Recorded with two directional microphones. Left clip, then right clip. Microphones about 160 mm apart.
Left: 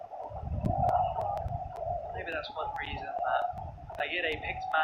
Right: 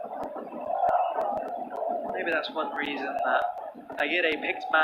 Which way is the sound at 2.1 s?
30° right (ahead or behind).